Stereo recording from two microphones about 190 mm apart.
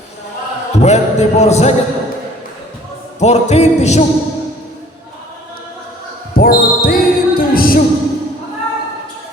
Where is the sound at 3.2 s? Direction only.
35° left (ahead or behind).